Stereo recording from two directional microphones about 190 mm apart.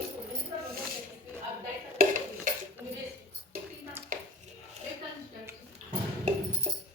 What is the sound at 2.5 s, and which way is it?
Dishes, 45° right (ahead or behind).